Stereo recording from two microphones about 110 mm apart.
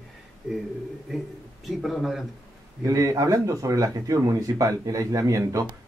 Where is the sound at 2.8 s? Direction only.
30° right (ahead or behind).